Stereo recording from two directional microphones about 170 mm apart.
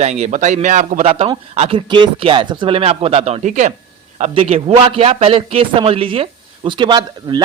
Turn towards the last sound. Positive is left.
turn(degrees=-25)  # may be behind; listen again after turning